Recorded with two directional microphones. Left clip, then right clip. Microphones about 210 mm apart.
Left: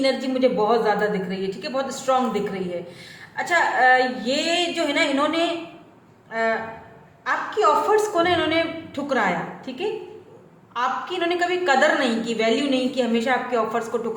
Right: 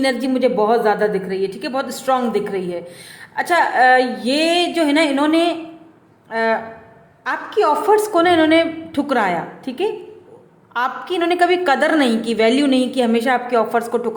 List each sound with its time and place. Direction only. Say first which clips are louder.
0.0 s a woman's voice: right 3 dB; 45° right (ahead or behind)